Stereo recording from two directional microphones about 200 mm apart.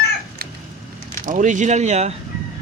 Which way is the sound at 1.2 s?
40° right (ahead or behind).